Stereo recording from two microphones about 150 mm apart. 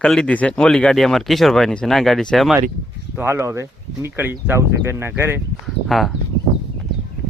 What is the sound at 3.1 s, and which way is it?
Speech, 15° right (ahead or behind).